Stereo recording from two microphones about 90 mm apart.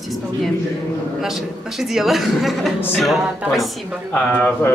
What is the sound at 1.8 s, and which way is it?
A woman's voice, 5° right (ahead or behind).